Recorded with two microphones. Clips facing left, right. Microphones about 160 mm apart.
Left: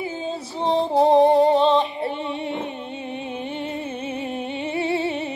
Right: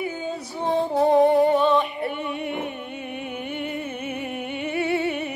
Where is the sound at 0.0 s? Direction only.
25° left (ahead or behind).